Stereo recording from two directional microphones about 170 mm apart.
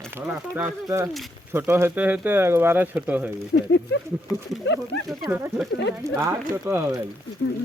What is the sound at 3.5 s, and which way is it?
Speech, 90° left.